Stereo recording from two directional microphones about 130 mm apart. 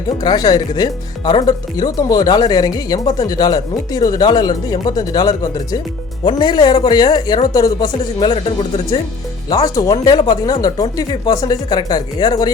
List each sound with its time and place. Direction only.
0.2 s speech: 30° left (ahead or behind)
9.5 s speech: 30° left (ahead or behind)